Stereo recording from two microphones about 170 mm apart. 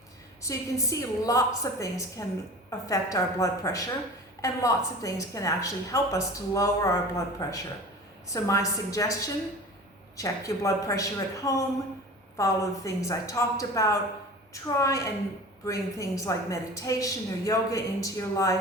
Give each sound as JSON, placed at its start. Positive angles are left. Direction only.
{"t": 0.4, "sound": "a woman's voice", "side_deg": 20}